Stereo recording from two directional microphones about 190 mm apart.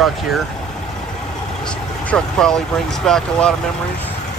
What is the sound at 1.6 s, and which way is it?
Speech, 5° left (ahead or behind).